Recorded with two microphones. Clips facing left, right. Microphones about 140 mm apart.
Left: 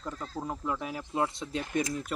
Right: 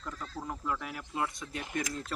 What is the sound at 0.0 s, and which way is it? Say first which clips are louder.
Speech: left 4 dB; 30° left (ahead or behind).